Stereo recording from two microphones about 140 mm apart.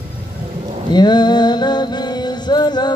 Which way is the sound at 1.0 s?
30° left (ahead or behind).